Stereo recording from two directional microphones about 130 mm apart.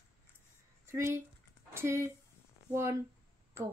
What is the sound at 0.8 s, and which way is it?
Speech, 20° right (ahead or behind).